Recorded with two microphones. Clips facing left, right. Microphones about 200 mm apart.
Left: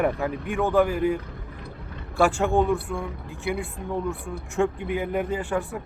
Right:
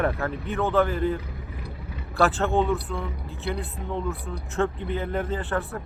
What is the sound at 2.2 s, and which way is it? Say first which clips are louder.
Speech: left 1 dB; 15° left (ahead or behind).